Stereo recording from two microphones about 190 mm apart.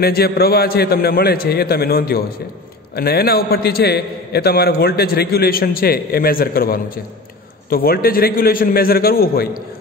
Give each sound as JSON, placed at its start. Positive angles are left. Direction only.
{"t": 0.0, "sound": "a man's voice", "side_deg": 55}